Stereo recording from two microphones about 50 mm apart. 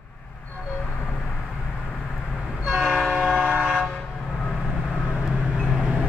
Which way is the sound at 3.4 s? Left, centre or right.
Right.